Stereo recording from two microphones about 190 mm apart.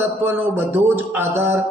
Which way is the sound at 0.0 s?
10° right (ahead or behind).